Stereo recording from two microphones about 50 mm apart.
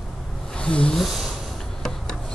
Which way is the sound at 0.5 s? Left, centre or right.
Left.